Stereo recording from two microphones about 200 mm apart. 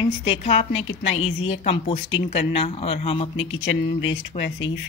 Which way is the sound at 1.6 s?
30° left (ahead or behind).